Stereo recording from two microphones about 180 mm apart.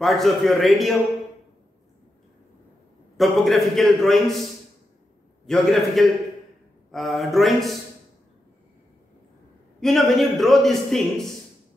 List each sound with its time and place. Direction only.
0.0 s a man's voice: centre (ahead or behind)
3.2 s a man's voice: centre (ahead or behind)
5.5 s a man's voice: centre (ahead or behind)
9.8 s a man's voice: centre (ahead or behind)